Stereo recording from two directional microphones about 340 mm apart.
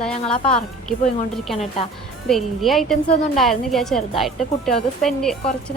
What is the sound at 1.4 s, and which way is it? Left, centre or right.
A woman's voice, centre.